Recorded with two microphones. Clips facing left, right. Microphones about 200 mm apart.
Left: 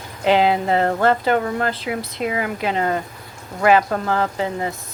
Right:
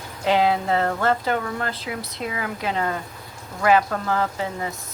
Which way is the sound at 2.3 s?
15° left (ahead or behind).